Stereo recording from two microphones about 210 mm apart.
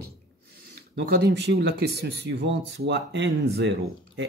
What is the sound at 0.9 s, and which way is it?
Speech, 55° right (ahead or behind).